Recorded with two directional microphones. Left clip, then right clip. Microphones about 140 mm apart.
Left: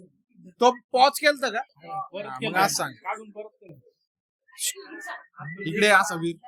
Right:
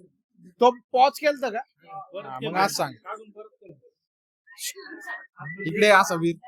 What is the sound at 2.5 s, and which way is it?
Speech, 30° right (ahead or behind).